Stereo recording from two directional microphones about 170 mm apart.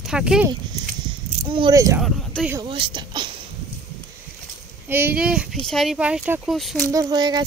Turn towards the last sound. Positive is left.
turn(degrees=-25)  # may be behind; listen again after turning